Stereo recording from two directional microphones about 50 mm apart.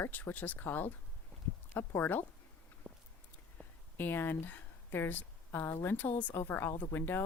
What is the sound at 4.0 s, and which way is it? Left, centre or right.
A woman's voice, left.